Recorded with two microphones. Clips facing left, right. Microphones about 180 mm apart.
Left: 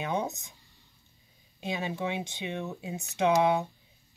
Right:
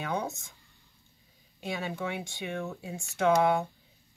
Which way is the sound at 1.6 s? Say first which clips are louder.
Left 2 dB; 20° left (ahead or behind).